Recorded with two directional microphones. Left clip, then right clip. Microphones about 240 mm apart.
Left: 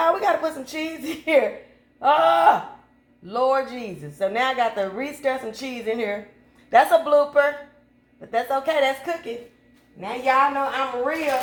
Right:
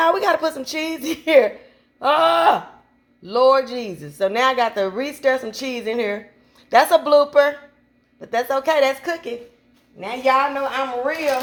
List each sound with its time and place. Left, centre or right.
0.0 s a woman's voice: right